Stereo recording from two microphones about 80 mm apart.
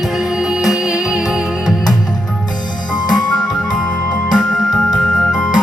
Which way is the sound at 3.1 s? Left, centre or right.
Left.